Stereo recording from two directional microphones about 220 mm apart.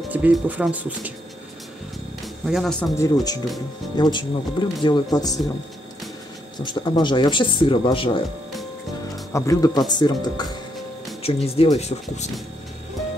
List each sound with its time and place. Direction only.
0.1 s speech: 5° right (ahead or behind)
2.4 s speech: centre (ahead or behind)
3.9 s speech: 20° left (ahead or behind)
6.6 s speech: 20° left (ahead or behind)
9.3 s speech: 15° left (ahead or behind)